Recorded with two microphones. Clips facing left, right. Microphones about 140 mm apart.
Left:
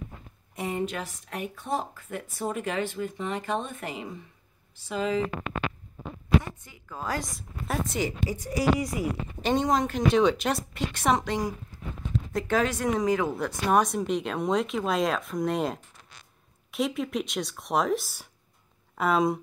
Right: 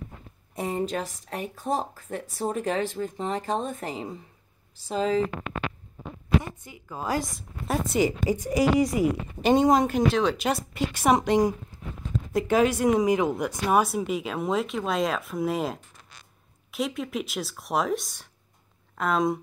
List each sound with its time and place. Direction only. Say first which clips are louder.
0.6 s speech: right 2 dB; 35° right (ahead or behind)
6.6 s a woman's voice: right 2 dB; 10° right (ahead or behind)
8.3 s a woman's voice: right 3 dB; 20° right (ahead or behind)
9.4 s a woman's voice: right 5 dB; 10° right (ahead or behind)